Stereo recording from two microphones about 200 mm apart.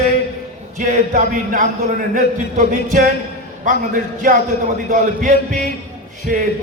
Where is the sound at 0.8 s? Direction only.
40° right (ahead or behind).